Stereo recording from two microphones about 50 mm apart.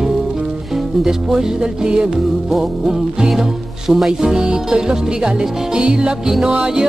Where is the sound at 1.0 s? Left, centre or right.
Centre.